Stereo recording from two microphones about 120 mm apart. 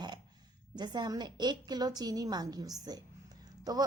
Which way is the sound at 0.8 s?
35° right (ahead or behind).